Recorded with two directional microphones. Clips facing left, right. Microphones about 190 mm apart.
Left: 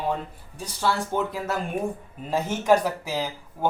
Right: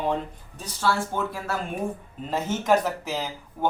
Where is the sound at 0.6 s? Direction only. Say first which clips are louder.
Even; 15° left (ahead or behind).